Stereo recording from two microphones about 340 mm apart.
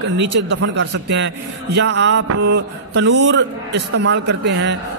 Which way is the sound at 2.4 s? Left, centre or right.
Right.